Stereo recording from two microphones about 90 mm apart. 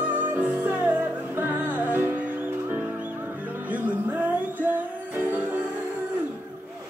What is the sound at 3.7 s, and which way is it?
Music, 20° right (ahead or behind).